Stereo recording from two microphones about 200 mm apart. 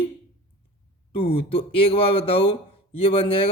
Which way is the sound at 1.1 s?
30° left (ahead or behind).